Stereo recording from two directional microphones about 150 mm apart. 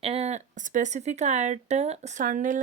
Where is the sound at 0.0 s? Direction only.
45° right (ahead or behind).